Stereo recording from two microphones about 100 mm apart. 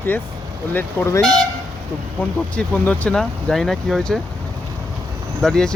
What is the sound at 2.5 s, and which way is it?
Speech, 10° left (ahead or behind).